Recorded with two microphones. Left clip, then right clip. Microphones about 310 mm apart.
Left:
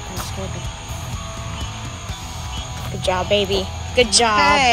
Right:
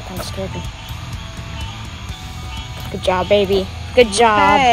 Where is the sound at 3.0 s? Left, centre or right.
Centre.